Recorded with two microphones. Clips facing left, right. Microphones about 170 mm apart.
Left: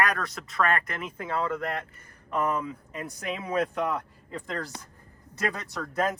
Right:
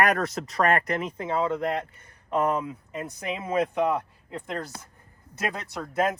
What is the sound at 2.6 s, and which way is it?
Speech, 15° right (ahead or behind).